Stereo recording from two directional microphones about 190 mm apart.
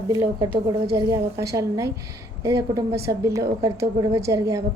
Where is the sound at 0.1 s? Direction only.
15° right (ahead or behind).